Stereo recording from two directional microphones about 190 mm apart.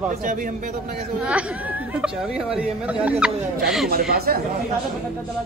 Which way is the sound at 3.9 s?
55° right (ahead or behind).